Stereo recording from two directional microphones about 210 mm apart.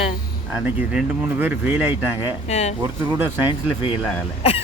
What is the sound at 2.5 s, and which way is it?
Speech, 30° left (ahead or behind).